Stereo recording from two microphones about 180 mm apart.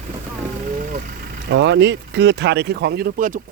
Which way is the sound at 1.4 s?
75° right (ahead or behind).